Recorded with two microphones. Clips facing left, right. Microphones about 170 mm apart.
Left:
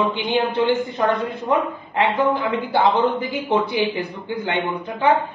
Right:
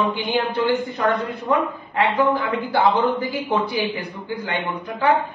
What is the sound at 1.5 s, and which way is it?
A man's voice, 20° left (ahead or behind).